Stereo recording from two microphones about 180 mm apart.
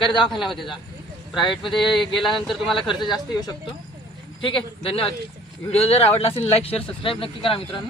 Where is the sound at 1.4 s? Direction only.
25° left (ahead or behind).